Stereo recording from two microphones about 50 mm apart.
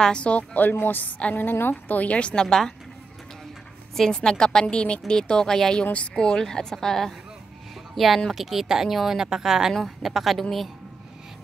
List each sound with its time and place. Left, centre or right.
0.0 s speech: left
0.6 s a woman's voice: left
4.1 s a woman's voice: centre